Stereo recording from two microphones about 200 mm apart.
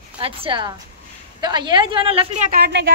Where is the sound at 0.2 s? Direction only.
25° right (ahead or behind).